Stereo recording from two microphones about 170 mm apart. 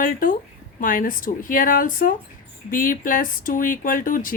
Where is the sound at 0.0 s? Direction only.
55° left (ahead or behind).